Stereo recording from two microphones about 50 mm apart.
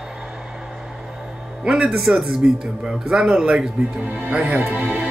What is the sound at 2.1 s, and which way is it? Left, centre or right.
Speech, centre.